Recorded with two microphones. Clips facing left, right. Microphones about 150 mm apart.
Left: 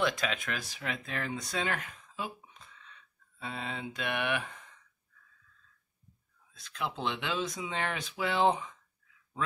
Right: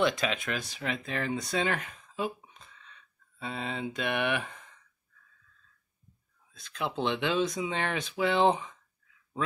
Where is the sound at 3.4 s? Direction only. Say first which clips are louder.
Right 4 dB; centre (ahead or behind).